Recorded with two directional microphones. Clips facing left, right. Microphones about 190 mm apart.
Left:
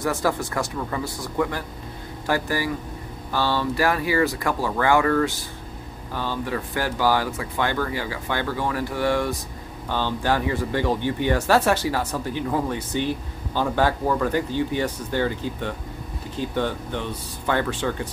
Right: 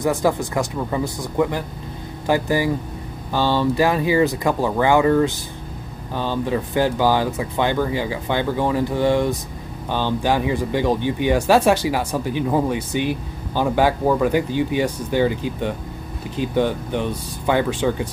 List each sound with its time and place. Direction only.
0.0 s speech: 20° right (ahead or behind)